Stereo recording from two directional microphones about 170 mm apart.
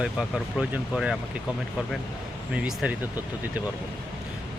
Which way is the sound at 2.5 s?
5° right (ahead or behind).